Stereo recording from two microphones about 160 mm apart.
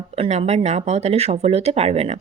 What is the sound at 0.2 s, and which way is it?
Speech, 45° right (ahead or behind).